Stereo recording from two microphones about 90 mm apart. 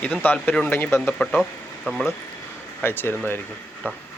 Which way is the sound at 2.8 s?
25° left (ahead or behind).